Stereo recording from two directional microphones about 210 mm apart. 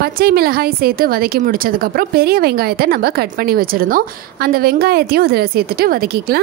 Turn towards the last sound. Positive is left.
turn(degrees=-45)  # may be behind; listen again after turning